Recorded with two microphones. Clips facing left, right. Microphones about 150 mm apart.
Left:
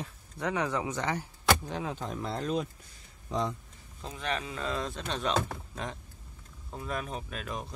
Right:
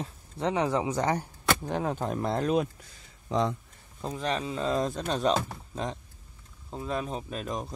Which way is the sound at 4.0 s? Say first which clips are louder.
Right 4 dB; 35° right (ahead or behind).